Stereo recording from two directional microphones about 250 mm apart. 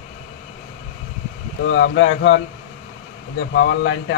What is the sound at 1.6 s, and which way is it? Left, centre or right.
Speech, left.